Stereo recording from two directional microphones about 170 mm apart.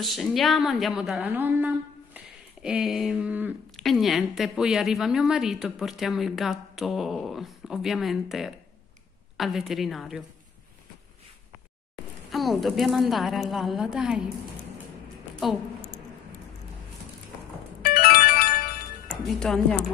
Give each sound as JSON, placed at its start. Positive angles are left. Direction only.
{"t": 0.0, "sound": "a woman's voice", "side_deg": 0}
{"t": 3.7, "sound": "a woman's voice", "side_deg": 0}
{"t": 12.3, "sound": "a woman's voice", "side_deg": 0}
{"t": 15.4, "sound": "a woman's voice", "side_deg": 0}
{"t": 17.8, "sound": "music", "side_deg": 60}
{"t": 19.0, "sound": "speech", "side_deg": 0}